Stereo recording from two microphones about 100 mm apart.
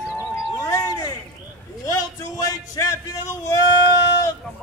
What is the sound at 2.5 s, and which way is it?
A man's voice, 35° left (ahead or behind).